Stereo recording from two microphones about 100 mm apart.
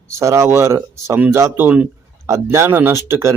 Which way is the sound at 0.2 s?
30° right (ahead or behind).